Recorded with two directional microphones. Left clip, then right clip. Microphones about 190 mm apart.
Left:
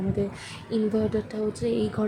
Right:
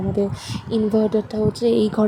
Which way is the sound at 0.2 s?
20° right (ahead or behind).